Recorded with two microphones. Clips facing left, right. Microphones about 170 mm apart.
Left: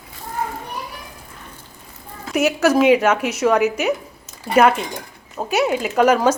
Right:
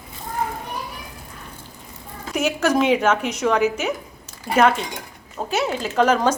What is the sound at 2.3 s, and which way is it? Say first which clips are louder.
Speech: left 4 dB; 10° left (ahead or behind).